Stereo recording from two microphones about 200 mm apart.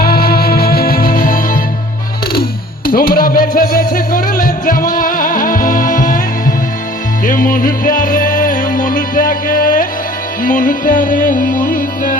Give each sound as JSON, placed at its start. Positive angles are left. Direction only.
{"t": 0.0, "sound": "music", "side_deg": 50}
{"t": 7.3, "sound": "music", "side_deg": 45}